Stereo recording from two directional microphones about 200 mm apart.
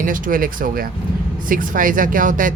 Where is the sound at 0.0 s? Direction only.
40° right (ahead or behind).